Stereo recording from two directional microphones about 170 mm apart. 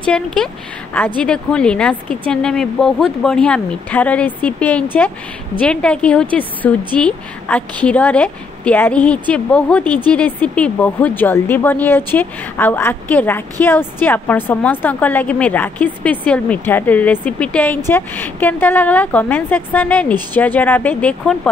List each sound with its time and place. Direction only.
0.0 s a woman's voice: 5° left (ahead or behind)